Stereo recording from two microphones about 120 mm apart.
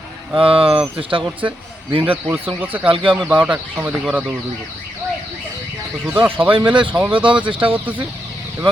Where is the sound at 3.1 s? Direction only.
5° left (ahead or behind).